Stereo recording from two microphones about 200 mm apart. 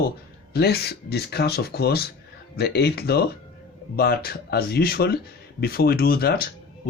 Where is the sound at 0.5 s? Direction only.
55° left (ahead or behind).